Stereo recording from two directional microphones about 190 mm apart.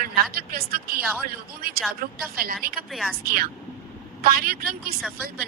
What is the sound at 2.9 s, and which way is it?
Speech, centre (ahead or behind).